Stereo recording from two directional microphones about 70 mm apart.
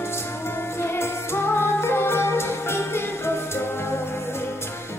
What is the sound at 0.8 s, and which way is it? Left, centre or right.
Music, left.